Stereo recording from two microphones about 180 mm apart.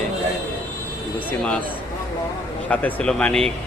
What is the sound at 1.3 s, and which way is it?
Speech, 5° left (ahead or behind).